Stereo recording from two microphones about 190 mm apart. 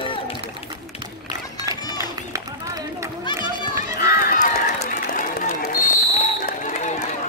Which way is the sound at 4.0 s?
50° left (ahead or behind).